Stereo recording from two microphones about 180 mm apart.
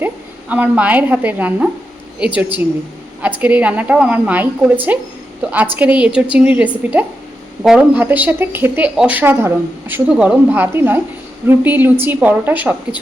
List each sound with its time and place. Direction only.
0.0 s a woman's voice: 10° right (ahead or behind)